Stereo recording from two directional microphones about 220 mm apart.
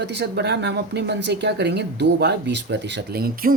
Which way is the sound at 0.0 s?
50° right (ahead or behind).